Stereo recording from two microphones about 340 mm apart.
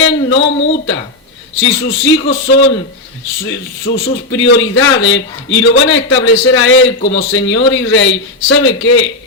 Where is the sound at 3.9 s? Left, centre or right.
Centre.